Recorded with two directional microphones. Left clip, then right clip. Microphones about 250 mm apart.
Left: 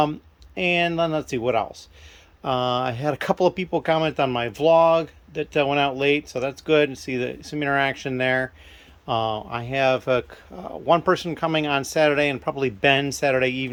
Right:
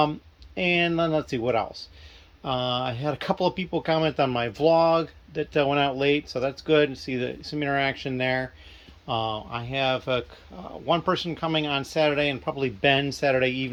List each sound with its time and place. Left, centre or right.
0.0 s speech: centre